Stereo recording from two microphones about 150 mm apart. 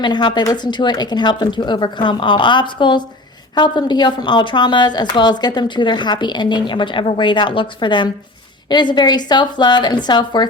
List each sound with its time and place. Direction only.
0.0 s a woman's voice: 30° left (ahead or behind)